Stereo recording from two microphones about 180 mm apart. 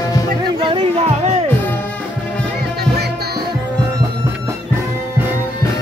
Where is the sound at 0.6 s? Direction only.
25° right (ahead or behind).